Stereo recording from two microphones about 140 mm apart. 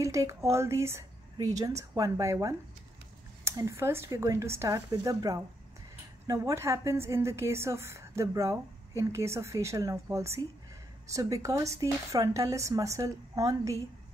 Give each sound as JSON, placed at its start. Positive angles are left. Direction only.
{"t": 0.0, "sound": "a woman's voice", "side_deg": -20}